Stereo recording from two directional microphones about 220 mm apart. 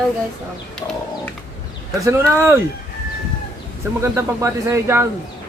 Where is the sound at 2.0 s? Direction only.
10° right (ahead or behind).